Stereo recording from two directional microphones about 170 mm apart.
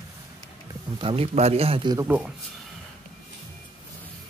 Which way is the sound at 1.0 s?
35° right (ahead or behind).